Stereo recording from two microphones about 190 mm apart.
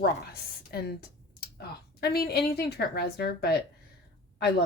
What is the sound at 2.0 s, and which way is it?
Speech, 55° left (ahead or behind).